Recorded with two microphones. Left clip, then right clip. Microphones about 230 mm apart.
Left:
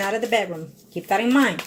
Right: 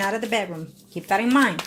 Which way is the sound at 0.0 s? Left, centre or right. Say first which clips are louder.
Left 2 dB; right.